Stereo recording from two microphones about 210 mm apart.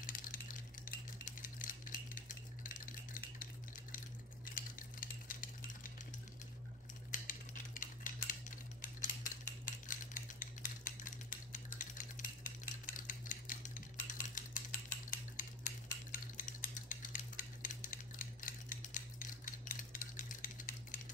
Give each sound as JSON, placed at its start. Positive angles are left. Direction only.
{"t": 0.0, "sound": "a sound", "side_deg": 40}
{"t": 4.6, "sound": "stir", "side_deg": 40}
{"t": 7.1, "sound": "typewriter", "side_deg": 40}